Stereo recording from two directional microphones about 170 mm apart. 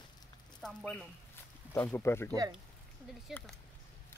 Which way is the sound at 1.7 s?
15° left (ahead or behind).